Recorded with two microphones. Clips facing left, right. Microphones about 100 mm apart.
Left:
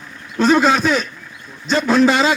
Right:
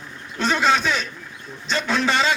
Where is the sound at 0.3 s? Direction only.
45° left (ahead or behind).